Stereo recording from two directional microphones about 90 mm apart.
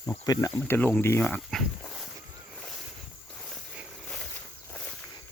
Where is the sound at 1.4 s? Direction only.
Centre (ahead or behind).